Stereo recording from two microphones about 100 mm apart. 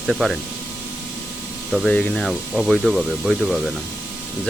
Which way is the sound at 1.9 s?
15° left (ahead or behind).